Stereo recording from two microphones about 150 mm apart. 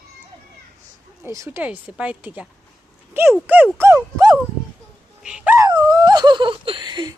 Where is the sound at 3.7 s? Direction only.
20° right (ahead or behind).